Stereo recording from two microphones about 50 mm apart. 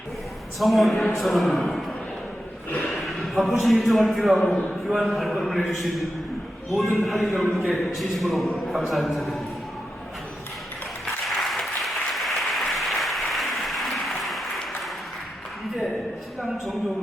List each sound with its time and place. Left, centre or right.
0.6 s a man's voice: centre
2.8 s a sound: centre
3.6 s a man's voice: centre
11.4 s applause: centre